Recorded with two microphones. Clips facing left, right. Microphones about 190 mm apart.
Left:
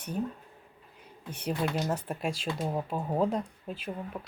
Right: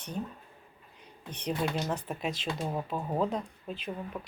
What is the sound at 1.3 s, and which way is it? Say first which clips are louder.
Speech: left 1 dB; 10° left (ahead or behind).